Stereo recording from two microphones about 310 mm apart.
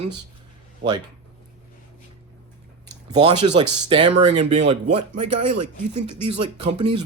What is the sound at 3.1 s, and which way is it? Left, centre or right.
Speech, centre.